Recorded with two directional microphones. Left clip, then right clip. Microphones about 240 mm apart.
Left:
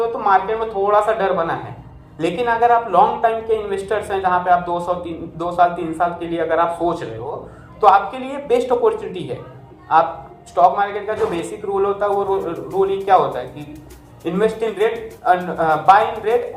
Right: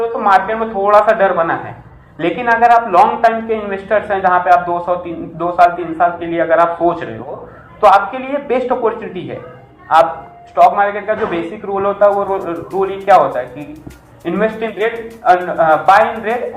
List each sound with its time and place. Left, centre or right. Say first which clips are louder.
0.0 s a man's voice: right 4 dB; left
10.5 s a man's voice: right 5 dB; centre